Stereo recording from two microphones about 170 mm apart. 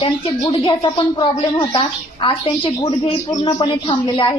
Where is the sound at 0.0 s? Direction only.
30° left (ahead or behind).